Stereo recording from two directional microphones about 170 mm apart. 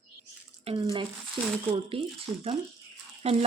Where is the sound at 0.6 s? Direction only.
35° right (ahead or behind).